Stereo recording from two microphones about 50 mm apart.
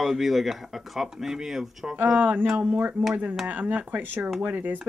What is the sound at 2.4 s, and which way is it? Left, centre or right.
Speech, centre.